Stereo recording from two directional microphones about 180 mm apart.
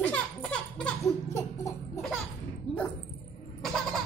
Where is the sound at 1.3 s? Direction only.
15° left (ahead or behind).